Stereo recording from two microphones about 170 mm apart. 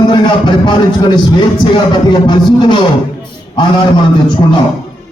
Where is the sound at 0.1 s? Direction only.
25° left (ahead or behind).